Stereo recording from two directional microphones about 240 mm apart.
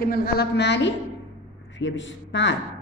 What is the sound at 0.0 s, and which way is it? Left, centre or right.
A woman's voice, left.